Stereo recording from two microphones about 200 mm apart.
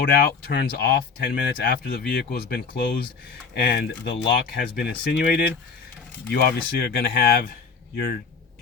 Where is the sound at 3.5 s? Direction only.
55° left (ahead or behind).